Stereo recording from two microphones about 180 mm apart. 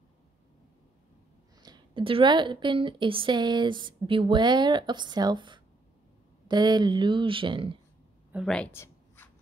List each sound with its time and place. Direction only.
1.6 s a woman's voice: 25° right (ahead or behind)
8.3 s speech: centre (ahead or behind)
8.7 s a sound: 15° left (ahead or behind)